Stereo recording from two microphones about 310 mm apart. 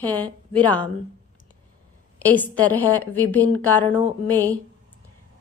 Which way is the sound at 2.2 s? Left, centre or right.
Centre.